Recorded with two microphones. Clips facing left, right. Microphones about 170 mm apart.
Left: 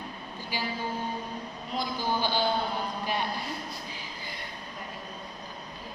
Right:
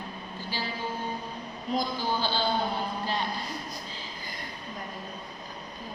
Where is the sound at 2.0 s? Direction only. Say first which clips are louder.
Left 1 dB; 15° left (ahead or behind).